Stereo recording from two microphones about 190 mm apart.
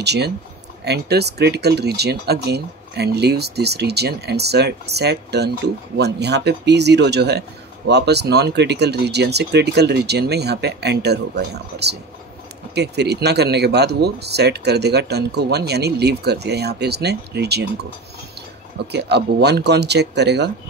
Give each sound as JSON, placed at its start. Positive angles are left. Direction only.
{"t": 0.0, "sound": "speech", "side_deg": -60}
{"t": 18.9, "sound": "speech", "side_deg": -60}